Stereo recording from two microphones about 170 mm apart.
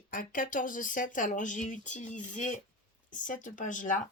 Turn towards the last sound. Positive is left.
turn(degrees=50)  # may be behind; listen again after turning